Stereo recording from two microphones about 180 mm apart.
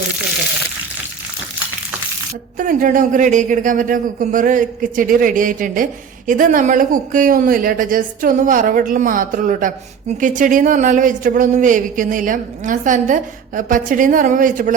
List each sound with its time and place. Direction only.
2.6 s speech: 50° right (ahead or behind)